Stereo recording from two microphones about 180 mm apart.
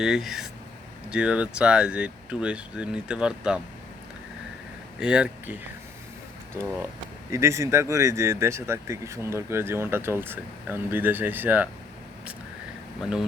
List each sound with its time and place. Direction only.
0.0 s speech: 5° right (ahead or behind)
4.9 s speech: 5° right (ahead or behind)
6.6 s speech: 15° right (ahead or behind)
13.0 s speech: centre (ahead or behind)